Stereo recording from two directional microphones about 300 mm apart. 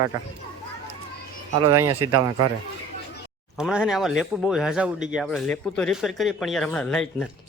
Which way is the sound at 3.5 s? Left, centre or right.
Centre.